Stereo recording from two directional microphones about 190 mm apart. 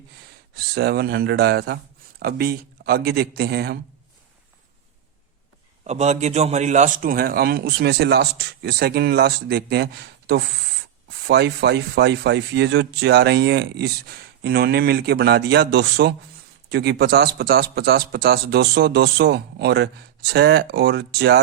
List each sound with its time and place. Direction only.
0.5 s speech: 60° right (ahead or behind)
5.8 s speech: 35° right (ahead or behind); by 21.4 s 60° right (ahead or behind)